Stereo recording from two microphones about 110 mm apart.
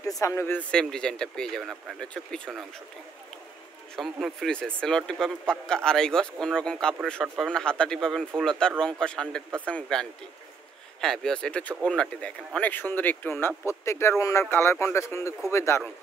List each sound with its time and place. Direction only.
0.0 s speech: 30° left (ahead or behind)
0.6 s speech: 10° left (ahead or behind)
3.9 s speech: centre (ahead or behind); by 15.8 s 25° left (ahead or behind)